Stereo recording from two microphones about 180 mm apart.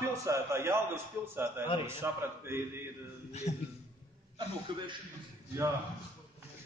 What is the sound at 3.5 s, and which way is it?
Speech, 40° left (ahead or behind).